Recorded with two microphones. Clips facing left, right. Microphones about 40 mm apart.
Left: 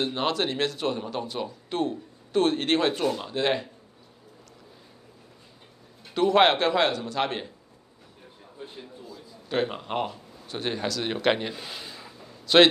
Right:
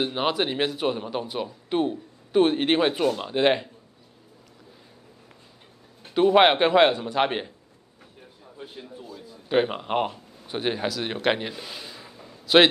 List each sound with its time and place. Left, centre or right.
0.0 s speech: centre
6.1 s speech: centre
9.1 s speech: centre